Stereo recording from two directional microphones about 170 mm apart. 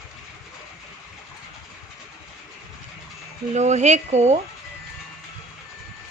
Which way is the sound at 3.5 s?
45° right (ahead or behind).